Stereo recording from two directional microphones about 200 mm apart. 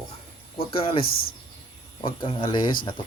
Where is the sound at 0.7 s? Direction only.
25° left (ahead or behind).